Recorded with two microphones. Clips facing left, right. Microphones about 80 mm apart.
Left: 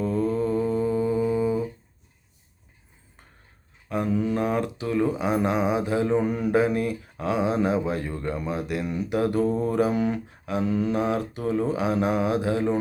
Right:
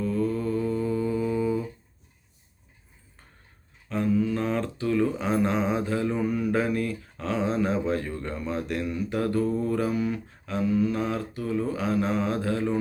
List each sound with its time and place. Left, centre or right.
0.0 s mantra: left
3.8 s mantra: centre
10.9 s mantra: left